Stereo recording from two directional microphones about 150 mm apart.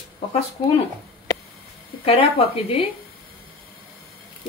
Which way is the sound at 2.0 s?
40° left (ahead or behind).